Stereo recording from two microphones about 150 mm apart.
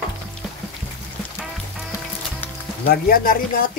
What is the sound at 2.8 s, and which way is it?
Speech, 85° left.